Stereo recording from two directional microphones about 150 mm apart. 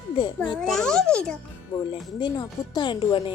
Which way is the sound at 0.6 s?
5° left (ahead or behind).